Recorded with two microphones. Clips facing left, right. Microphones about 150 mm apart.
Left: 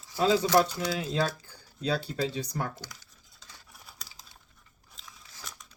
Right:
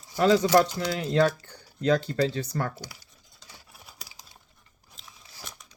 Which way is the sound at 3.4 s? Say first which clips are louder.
Right 2 dB; 10° right (ahead or behind).